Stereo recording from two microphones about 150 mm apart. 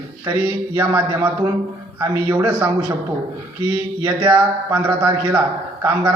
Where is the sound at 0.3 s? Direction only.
20° right (ahead or behind).